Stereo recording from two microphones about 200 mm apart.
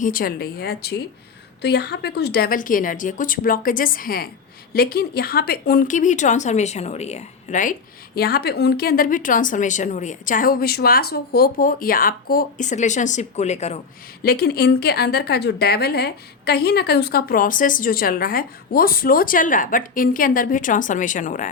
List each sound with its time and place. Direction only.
0.0 s speech: 45° left (ahead or behind)
14.3 s speech: 50° left (ahead or behind)